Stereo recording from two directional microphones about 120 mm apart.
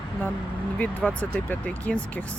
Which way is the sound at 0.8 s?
15° left (ahead or behind).